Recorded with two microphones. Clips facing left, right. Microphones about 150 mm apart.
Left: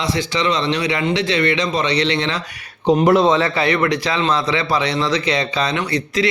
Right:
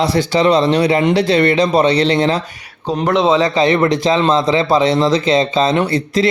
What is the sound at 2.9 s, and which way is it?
Speech, 20° left (ahead or behind).